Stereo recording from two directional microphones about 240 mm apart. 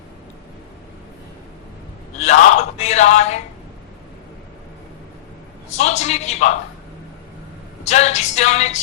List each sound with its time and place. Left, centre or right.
2.1 s a sound: left
5.7 s music: left
7.9 s music: left